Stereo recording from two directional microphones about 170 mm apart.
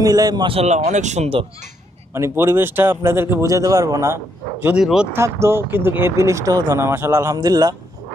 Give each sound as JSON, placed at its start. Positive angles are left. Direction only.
{"t": 0.0, "sound": "speech", "side_deg": -20}
{"t": 2.1, "sound": "speech", "side_deg": -15}
{"t": 4.6, "sound": "speech", "side_deg": -5}